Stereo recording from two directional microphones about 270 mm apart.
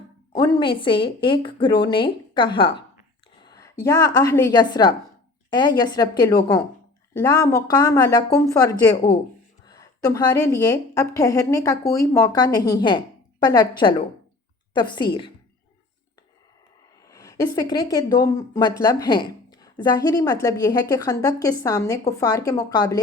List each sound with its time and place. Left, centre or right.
0.3 s a woman's voice: centre
17.1 s a sound: centre
17.9 s a woman's voice: centre